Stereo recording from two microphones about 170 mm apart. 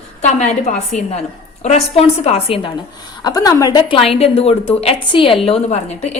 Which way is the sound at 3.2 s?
20° left (ahead or behind).